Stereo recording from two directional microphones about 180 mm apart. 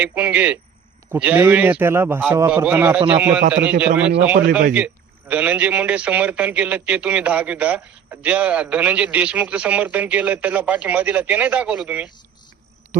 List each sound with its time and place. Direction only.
0.0 s a man's voice: 10° right (ahead or behind)
5.3 s a man's voice: 10° right (ahead or behind)
12.9 s frog: 45° right (ahead or behind)